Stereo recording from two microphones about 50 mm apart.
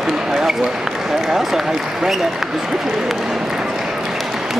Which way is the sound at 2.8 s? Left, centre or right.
Centre.